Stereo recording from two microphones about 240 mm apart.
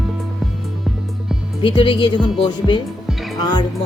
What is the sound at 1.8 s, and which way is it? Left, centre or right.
Speech, left.